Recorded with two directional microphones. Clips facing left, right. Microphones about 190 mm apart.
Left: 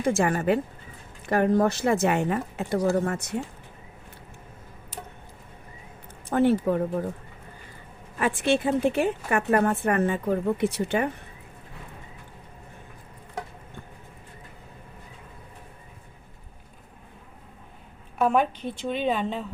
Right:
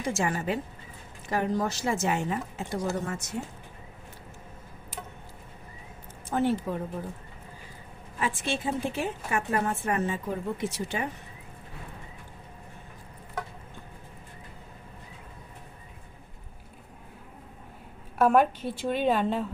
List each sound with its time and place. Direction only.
0.0 s a woman's voice: 55° left (ahead or behind)
6.3 s a woman's voice: 60° left (ahead or behind)
8.2 s a woman's voice: 65° left (ahead or behind)
18.2 s a woman's voice: 5° right (ahead or behind)